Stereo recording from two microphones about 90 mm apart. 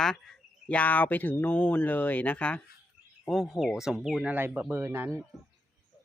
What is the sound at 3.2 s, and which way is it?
Speech, 5° left (ahead or behind).